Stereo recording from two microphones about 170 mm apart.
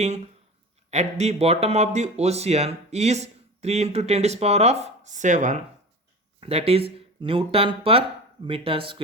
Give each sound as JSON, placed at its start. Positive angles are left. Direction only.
{"t": 0.9, "sound": "speech", "side_deg": -40}
{"t": 6.4, "sound": "speech", "side_deg": -35}